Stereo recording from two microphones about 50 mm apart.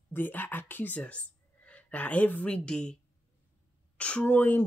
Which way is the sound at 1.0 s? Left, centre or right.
Left.